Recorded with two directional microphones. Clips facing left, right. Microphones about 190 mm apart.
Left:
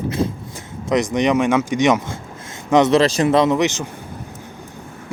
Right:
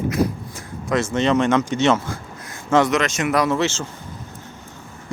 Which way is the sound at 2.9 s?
35° left (ahead or behind).